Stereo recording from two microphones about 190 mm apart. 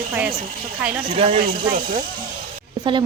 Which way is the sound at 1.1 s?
30° right (ahead or behind).